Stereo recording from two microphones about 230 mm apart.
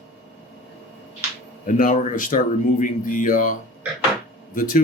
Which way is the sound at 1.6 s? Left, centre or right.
Left.